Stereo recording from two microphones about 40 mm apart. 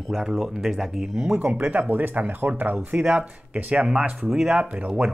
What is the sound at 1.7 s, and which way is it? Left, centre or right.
Speech, right.